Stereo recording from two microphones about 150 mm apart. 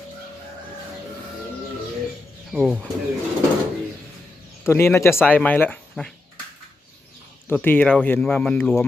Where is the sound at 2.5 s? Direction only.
5° right (ahead or behind).